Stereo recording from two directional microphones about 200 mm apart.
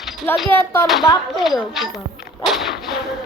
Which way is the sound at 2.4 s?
Centre (ahead or behind).